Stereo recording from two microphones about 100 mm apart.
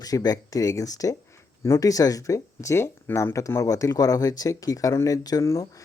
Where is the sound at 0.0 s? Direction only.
40° left (ahead or behind).